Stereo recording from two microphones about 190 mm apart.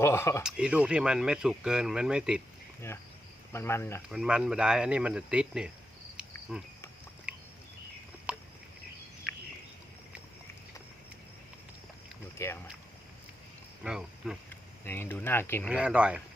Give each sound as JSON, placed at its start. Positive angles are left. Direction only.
{"t": 0.0, "sound": "speech", "side_deg": 15}
{"t": 0.4, "sound": "speech", "side_deg": -5}
{"t": 3.5, "sound": "speech", "side_deg": 15}
{"t": 4.1, "sound": "speech", "side_deg": -5}
{"t": 7.3, "sound": "a sound", "side_deg": -5}
{"t": 12.4, "sound": "speech", "side_deg": 15}
{"t": 13.8, "sound": "speech", "side_deg": -5}
{"t": 14.8, "sound": "speech", "side_deg": 10}
{"t": 15.7, "sound": "speech", "side_deg": -5}